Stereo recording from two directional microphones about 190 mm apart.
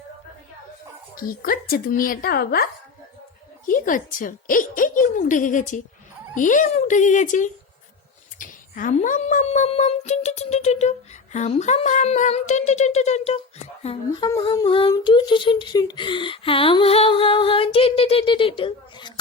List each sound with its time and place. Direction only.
1.1 s speech: 50° left (ahead or behind)
3.7 s speech: 45° left (ahead or behind)
13.8 s humming: 25° left (ahead or behind)